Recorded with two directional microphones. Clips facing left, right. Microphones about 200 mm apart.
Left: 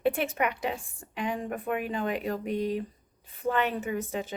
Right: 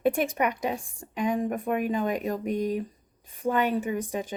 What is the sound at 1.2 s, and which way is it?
Speech, 15° right (ahead or behind).